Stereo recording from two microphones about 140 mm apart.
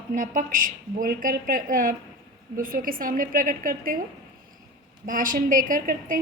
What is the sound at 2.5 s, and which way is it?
A woman's voice, 85° right.